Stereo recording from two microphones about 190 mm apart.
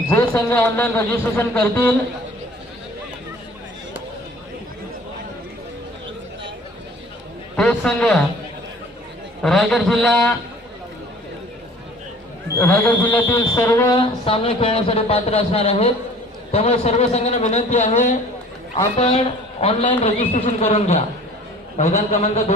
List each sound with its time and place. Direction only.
0.1 s a man's voice: 10° left (ahead or behind)
7.5 s a man's voice: 5° left (ahead or behind)
9.4 s a man's voice: 5° left (ahead or behind)
12.5 s a man's voice: 10° left (ahead or behind); by 22.5 s 35° left (ahead or behind)